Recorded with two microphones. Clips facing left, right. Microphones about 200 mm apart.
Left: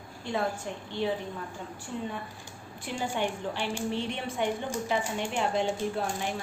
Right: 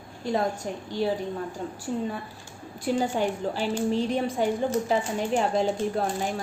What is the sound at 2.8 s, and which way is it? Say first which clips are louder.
A woman's voice: right 6 dB; 40° right (ahead or behind).